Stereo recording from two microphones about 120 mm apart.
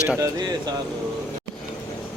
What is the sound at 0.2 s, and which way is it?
Speech, 35° right (ahead or behind).